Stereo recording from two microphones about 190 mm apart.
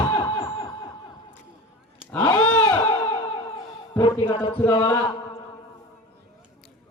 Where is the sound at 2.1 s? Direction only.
10° left (ahead or behind).